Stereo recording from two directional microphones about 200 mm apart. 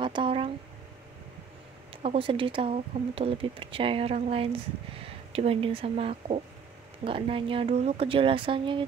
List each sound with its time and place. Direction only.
0.0 s speech: 25° right (ahead or behind)
2.0 s speech: 25° right (ahead or behind)